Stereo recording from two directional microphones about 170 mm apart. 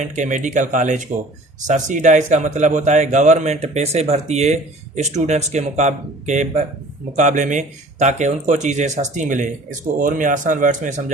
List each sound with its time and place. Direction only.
0.0 s a man's voice: 45° right (ahead or behind)